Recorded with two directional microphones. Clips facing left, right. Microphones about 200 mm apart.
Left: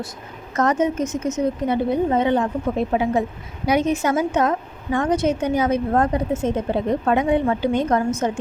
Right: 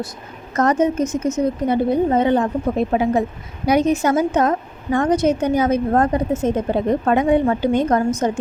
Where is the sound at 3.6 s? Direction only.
40° right (ahead or behind).